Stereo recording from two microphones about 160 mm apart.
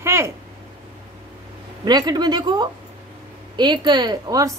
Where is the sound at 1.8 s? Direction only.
25° right (ahead or behind).